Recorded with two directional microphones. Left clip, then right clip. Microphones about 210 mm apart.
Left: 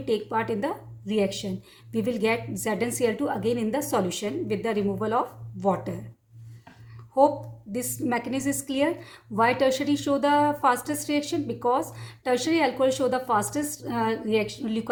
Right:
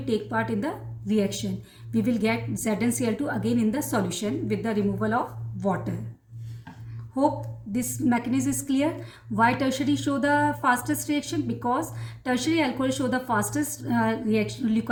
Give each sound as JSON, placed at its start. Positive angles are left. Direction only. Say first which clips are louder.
{"t": 0.0, "sound": "a woman's voice", "louder": "left 1 dB", "side_deg": 25}
{"t": 7.7, "sound": "a woman's voice", "louder": "right 1 dB", "side_deg": 25}